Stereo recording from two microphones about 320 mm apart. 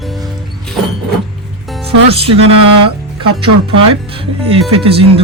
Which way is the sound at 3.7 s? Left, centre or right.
Centre.